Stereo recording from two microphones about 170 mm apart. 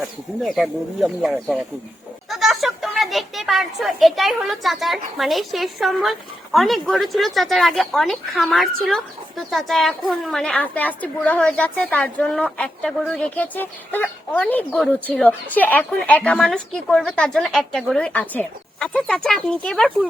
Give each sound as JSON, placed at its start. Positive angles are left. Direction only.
{"t": 0.4, "sound": "a woman's voice", "side_deg": 0}